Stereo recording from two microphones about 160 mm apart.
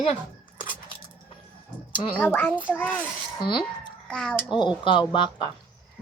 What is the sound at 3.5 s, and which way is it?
Speech, 30° left (ahead or behind).